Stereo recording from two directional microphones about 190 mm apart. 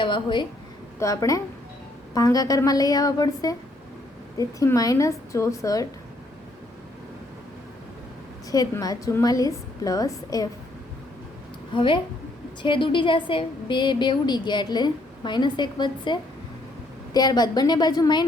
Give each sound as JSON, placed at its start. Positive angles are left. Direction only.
{"t": 0.0, "sound": "a woman's voice", "side_deg": 25}
{"t": 8.4, "sound": "a woman's voice", "side_deg": 20}
{"t": 11.7, "sound": "a woman's voice", "side_deg": 25}